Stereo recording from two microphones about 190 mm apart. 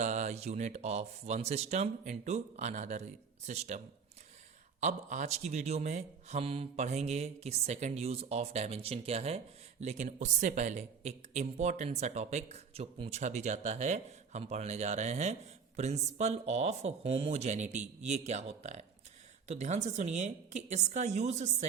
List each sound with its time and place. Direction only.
0.0 s speech: 40° right (ahead or behind)
4.8 s speech: 40° right (ahead or behind)